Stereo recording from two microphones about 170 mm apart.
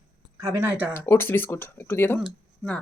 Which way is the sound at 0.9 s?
15° left (ahead or behind).